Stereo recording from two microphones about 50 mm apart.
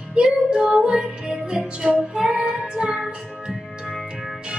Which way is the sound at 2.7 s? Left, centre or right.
Centre.